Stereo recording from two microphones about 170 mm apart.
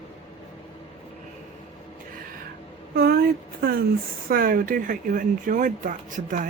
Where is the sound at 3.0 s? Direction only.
65° right (ahead or behind).